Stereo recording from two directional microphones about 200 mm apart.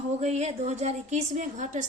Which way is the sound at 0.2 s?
35° right (ahead or behind).